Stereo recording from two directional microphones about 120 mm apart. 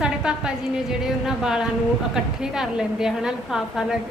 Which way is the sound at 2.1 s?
5° right (ahead or behind).